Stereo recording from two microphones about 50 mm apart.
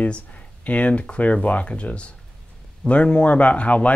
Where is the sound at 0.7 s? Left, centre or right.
Left.